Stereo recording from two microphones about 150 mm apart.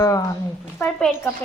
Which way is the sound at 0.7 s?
10° left (ahead or behind).